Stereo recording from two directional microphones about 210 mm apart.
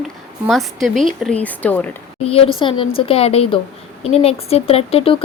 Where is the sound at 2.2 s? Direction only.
30° left (ahead or behind).